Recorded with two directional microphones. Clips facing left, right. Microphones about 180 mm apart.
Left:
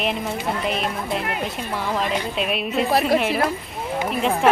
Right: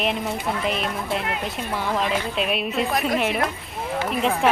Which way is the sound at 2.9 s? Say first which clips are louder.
Left 4 dB; 35° left (ahead or behind).